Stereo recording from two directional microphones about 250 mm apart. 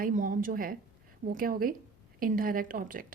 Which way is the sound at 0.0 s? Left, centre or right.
Right.